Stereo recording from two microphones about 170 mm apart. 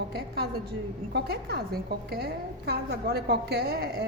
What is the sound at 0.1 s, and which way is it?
A woman's voice, 65° right (ahead or behind).